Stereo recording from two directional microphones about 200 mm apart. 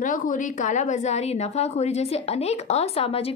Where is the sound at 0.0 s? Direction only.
40° left (ahead or behind).